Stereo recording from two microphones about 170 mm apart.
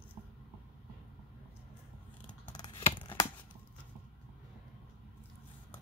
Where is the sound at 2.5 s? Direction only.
25° left (ahead or behind).